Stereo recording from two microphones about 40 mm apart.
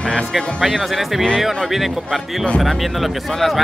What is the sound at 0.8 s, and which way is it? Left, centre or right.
Speech, centre.